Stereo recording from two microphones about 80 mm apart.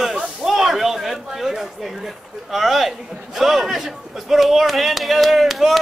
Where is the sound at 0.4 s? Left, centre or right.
Centre.